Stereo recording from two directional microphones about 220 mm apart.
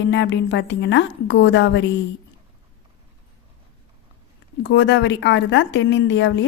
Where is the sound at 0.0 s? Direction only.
55° left (ahead or behind).